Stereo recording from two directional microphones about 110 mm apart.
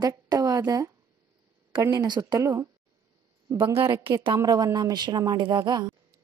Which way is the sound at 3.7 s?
25° right (ahead or behind).